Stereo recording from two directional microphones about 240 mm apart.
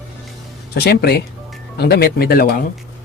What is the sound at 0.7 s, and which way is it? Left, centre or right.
Speech, left.